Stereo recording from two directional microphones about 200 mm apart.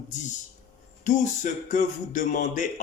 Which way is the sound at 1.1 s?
40° left (ahead or behind).